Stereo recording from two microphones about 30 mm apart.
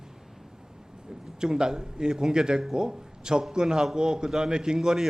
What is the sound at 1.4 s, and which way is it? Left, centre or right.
A man's voice, right.